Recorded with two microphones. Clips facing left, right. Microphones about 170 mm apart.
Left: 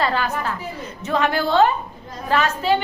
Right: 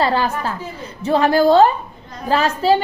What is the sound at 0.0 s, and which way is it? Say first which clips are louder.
A woman's voice: right 4 dB; 30° right (ahead or behind).